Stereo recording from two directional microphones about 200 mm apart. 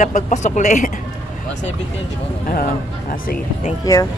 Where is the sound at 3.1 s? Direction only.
45° left (ahead or behind).